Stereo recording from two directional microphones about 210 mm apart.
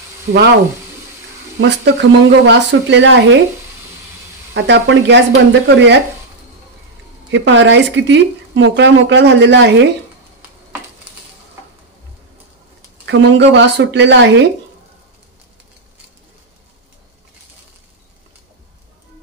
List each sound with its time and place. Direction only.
1.6 s speech: 55° right (ahead or behind)
4.6 s speech: 55° right (ahead or behind)
7.2 s speech: 60° right (ahead or behind)
13.0 s speech: 55° right (ahead or behind)